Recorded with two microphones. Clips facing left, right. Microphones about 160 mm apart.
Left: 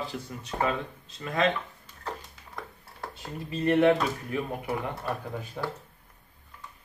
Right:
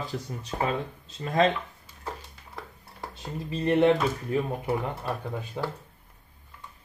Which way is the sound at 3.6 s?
30° right (ahead or behind).